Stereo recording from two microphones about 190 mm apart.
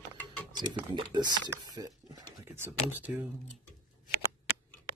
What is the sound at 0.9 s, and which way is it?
Speech, 20° right (ahead or behind).